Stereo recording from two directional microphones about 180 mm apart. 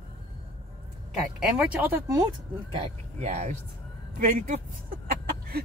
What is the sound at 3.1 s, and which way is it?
Speech, 40° right (ahead or behind).